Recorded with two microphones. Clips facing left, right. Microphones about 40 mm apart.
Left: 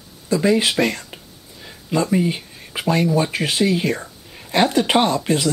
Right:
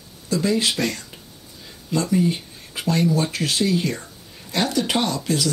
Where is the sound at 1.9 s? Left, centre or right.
Left.